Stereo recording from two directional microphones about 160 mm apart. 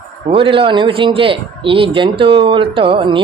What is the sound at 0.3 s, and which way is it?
Speech, 35° right (ahead or behind).